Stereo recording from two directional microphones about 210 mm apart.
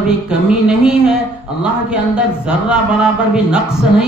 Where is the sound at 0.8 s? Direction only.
5° right (ahead or behind).